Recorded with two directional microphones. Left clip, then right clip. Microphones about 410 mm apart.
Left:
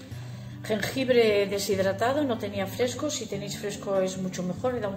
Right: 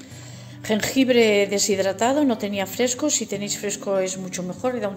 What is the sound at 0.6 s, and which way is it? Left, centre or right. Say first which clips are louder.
A woman's voice: right 5 dB; centre.